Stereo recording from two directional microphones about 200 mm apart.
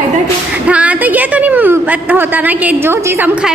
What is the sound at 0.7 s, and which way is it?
A woman's voice, 5° right (ahead or behind).